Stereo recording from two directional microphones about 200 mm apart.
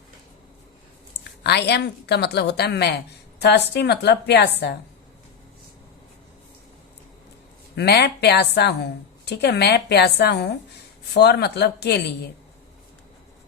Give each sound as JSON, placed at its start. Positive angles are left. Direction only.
{"t": 1.5, "sound": "a woman's voice", "side_deg": 55}
{"t": 7.8, "sound": "a woman's voice", "side_deg": 55}